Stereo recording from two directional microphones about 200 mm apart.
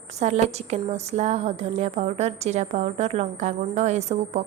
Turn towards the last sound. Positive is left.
turn(degrees=-35)  # may be behind; listen again after turning